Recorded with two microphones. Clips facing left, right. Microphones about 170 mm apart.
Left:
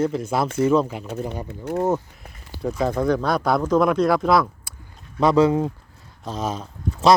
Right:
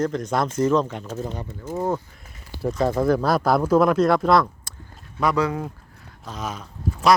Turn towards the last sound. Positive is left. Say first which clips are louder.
# left 2 dB
turn(degrees=25)  # may be behind; listen again after turning